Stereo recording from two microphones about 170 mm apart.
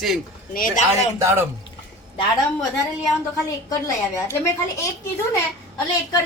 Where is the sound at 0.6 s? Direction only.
55° left (ahead or behind).